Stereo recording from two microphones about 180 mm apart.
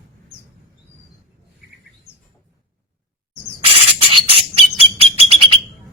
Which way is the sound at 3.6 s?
30° right (ahead or behind).